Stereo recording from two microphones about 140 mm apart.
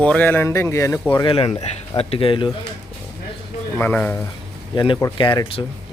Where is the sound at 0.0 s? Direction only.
10° left (ahead or behind).